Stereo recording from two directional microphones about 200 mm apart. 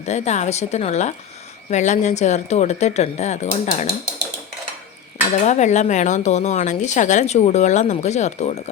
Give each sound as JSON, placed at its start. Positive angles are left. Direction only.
{"t": 0.0, "sound": "a woman's voice", "side_deg": 35}
{"t": 5.5, "sound": "a woman's voice", "side_deg": 35}